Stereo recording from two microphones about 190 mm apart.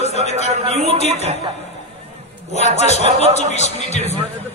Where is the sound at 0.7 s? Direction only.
35° right (ahead or behind).